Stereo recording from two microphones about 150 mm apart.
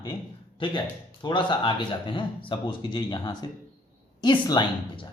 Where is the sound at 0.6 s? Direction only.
35° left (ahead or behind).